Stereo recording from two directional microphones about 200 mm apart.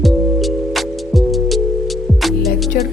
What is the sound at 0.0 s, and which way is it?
Music, centre (ahead or behind).